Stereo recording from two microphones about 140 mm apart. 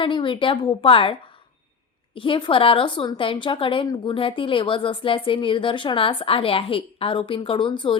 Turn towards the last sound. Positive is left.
turn(degrees=35)  # may be behind; listen again after turning